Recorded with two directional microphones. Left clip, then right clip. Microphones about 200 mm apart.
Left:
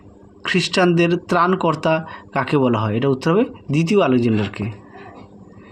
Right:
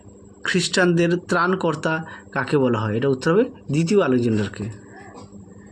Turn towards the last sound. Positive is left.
turn(degrees=20)  # may be behind; listen again after turning